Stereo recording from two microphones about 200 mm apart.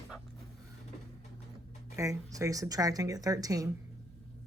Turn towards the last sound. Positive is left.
turn(degrees=-15)  # may be behind; listen again after turning